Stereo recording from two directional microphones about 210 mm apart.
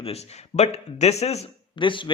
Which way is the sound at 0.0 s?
30° left (ahead or behind).